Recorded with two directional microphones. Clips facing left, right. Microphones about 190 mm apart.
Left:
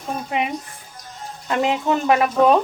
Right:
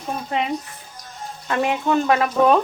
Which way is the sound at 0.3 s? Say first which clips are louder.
Right 1 dB; 15° left (ahead or behind).